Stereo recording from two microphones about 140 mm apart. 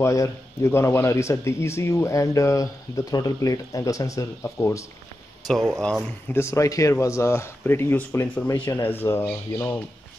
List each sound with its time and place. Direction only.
0.0 s speech: 20° left (ahead or behind)
5.5 s speech: centre (ahead or behind)
6.3 s speech: 20° left (ahead or behind)